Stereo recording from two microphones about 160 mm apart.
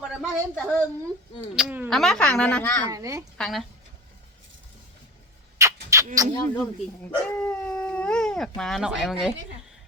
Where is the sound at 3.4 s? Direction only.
Centre (ahead or behind).